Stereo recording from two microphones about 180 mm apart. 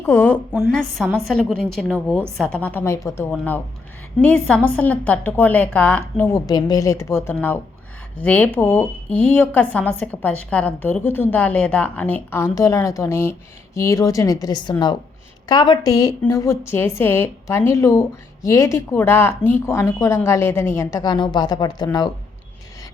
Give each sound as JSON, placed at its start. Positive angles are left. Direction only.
{"t": 0.0, "sound": "a woman's voice", "side_deg": 10}
{"t": 0.5, "sound": "a woman's voice", "side_deg": 0}